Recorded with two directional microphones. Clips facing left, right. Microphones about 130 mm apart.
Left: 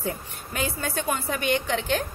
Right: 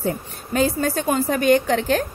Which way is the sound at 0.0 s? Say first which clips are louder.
Right 6 dB; 35° right (ahead or behind).